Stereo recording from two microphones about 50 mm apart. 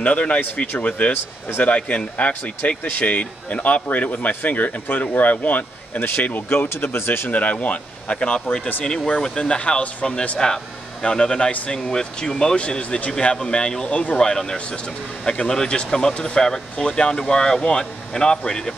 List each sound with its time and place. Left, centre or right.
0.0 s speech: left
6.7 s speech: left
7.2 s speech: left
14.1 s speech: centre